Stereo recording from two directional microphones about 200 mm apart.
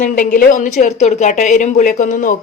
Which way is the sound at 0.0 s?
40° left (ahead or behind).